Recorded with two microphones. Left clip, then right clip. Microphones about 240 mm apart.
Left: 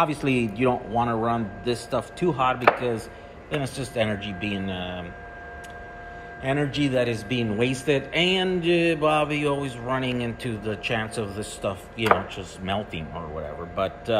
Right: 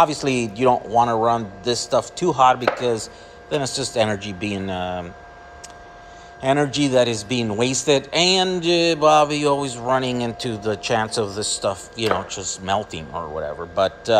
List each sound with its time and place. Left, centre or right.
0.0 s a man's voice: centre
6.4 s speech: right